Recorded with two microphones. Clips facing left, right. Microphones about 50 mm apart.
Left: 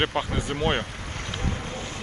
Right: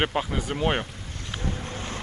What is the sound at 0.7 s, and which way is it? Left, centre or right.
Boat, left.